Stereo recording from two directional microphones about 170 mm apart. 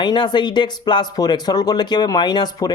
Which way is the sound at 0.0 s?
25° left (ahead or behind).